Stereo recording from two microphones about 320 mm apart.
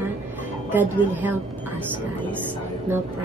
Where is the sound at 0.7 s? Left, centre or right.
Centre.